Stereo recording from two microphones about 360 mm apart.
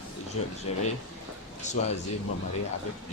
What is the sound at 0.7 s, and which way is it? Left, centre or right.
Speech, centre.